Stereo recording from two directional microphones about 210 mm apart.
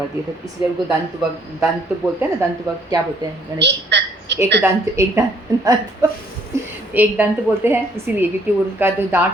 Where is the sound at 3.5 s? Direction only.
55° right (ahead or behind).